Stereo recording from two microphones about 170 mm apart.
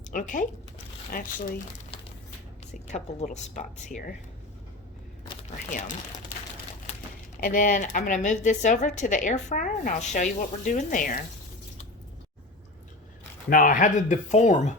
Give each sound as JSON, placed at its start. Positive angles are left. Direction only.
{"t": 0.1, "sound": "speech", "side_deg": 50}
{"t": 2.7, "sound": "speech", "side_deg": 40}
{"t": 5.7, "sound": "speech", "side_deg": 50}
{"t": 7.4, "sound": "speech", "side_deg": 50}
{"t": 13.5, "sound": "speech", "side_deg": 50}